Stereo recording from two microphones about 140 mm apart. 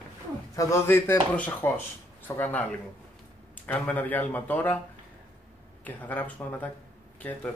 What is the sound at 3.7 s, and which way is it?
Speech, 10° left (ahead or behind).